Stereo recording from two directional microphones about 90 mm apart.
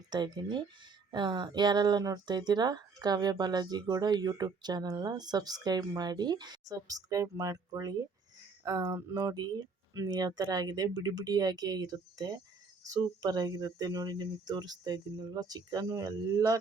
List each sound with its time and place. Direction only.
0.1 s speech: 60° right (ahead or behind); by 16.6 s 40° right (ahead or behind)